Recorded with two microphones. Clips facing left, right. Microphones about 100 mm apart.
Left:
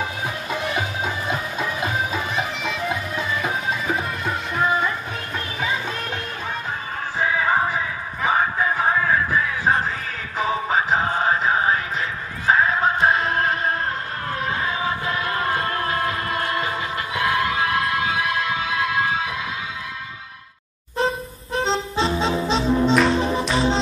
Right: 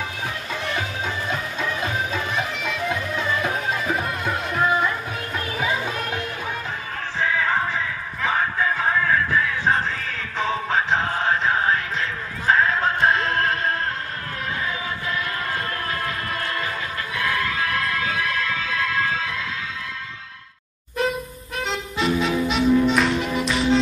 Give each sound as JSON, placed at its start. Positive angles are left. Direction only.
{"t": 0.6, "sound": "music", "side_deg": 10}
{"t": 7.2, "sound": "music", "side_deg": 10}
{"t": 14.5, "sound": "music", "side_deg": 35}
{"t": 21.0, "sound": "music", "side_deg": 30}